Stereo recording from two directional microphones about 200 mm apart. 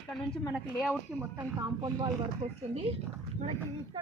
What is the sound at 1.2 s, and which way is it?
Speech, 15° right (ahead or behind).